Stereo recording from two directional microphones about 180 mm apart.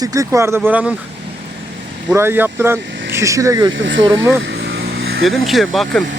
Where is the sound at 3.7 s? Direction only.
90° right.